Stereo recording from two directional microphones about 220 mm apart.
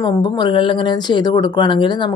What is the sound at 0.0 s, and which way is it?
Speech, 20° left (ahead or behind).